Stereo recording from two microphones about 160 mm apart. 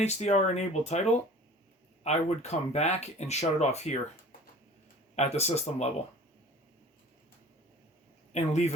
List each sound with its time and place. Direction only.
0.0 s speech: 45° left (ahead or behind)
5.1 s speech: 45° left (ahead or behind)
8.3 s speech: 45° left (ahead or behind)